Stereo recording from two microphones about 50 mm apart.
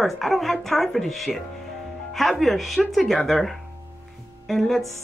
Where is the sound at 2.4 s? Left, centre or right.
Centre.